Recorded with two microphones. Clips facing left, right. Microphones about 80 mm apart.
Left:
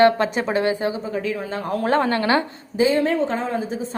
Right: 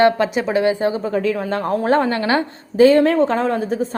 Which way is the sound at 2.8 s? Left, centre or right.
Right.